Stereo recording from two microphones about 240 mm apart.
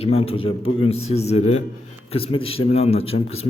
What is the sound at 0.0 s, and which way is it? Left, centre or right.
Speech, left.